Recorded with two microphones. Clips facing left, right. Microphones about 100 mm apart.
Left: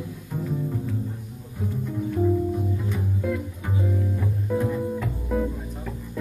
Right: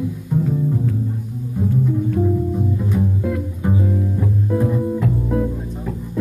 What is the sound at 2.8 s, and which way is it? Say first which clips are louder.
Music: right 8 dB; 15° right (ahead or behind).